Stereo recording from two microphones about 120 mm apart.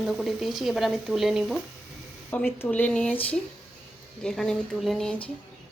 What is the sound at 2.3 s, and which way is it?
Speech, 15° left (ahead or behind).